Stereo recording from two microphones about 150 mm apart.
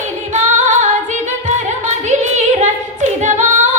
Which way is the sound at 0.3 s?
55° right (ahead or behind).